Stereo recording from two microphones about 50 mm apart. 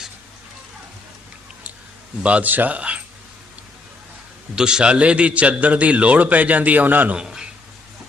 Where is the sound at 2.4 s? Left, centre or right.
Right.